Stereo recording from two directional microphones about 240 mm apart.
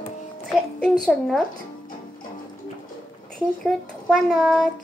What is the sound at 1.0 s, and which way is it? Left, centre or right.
Speech, centre.